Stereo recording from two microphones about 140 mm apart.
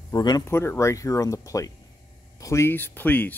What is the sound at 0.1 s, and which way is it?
Speech, 30° left (ahead or behind).